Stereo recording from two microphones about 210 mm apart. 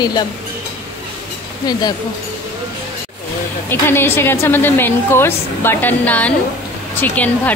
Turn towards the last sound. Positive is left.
turn(degrees=10)  # may be behind; listen again after turning